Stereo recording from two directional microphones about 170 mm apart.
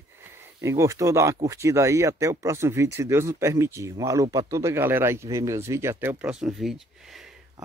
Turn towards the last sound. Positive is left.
turn(degrees=-5)  # may be behind; listen again after turning